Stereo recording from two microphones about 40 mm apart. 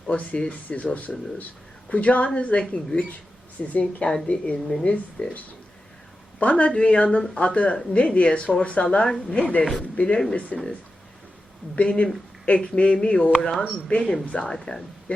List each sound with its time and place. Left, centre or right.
0.3 s a woman's voice: left
6.4 s a woman's voice: left
9.0 s a woman's voice: centre
9.4 s a woman's voice: left
11.8 s a woman's voice: left
13.4 s a woman's voice: centre
14.3 s a woman's voice: left
14.5 s a woman's voice: centre